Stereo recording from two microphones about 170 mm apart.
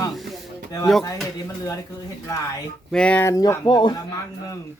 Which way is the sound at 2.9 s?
5° left (ahead or behind).